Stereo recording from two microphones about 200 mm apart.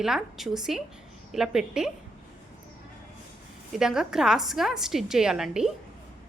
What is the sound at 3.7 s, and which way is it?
A woman's voice, 5° right (ahead or behind).